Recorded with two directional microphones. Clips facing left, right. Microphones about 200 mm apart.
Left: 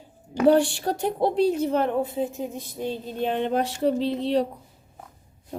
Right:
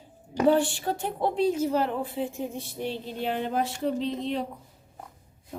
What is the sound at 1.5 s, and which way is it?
Speech, 60° left (ahead or behind).